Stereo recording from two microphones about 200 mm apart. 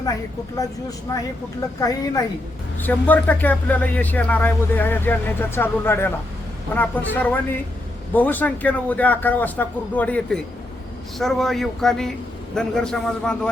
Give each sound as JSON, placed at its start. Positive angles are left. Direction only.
{"t": 0.0, "sound": "a man's voice", "side_deg": 15}